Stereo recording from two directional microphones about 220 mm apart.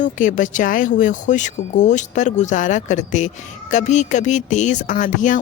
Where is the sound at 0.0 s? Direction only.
35° left (ahead or behind).